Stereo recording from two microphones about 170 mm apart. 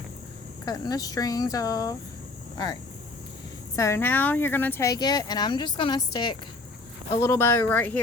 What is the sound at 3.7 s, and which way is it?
Speech, 15° left (ahead or behind).